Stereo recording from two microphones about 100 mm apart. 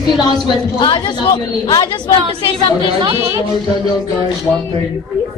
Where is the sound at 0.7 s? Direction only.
55° left (ahead or behind).